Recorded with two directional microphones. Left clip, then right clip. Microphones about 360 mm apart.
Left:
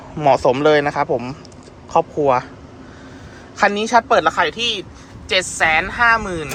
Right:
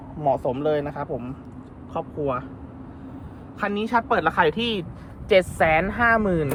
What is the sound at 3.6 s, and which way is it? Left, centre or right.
Speech, centre.